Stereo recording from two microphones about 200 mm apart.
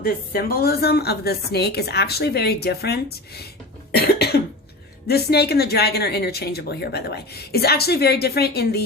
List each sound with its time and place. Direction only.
0.0 s a woman's voice: 50° left (ahead or behind)
3.9 s cough: 55° left (ahead or behind)
5.0 s a woman's voice: 55° left (ahead or behind)